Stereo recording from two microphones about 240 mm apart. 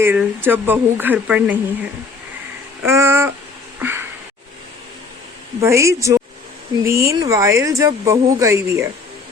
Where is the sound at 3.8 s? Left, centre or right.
Centre.